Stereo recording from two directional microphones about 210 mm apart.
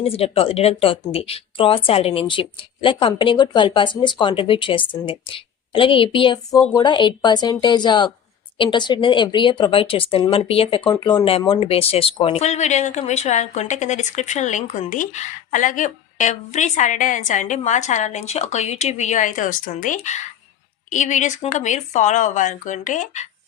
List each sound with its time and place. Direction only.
0.0 s a woman's voice: 30° left (ahead or behind)